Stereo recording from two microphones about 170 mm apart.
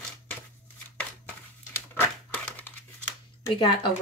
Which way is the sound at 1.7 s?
10° left (ahead or behind).